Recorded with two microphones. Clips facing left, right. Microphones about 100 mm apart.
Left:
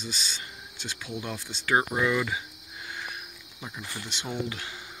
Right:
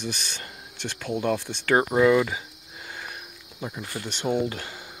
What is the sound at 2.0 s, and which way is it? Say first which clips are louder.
Speech: right 7 dB; 35° right (ahead or behind).